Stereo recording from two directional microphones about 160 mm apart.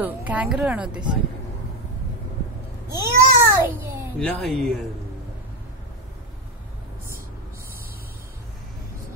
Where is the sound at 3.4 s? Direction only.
15° right (ahead or behind).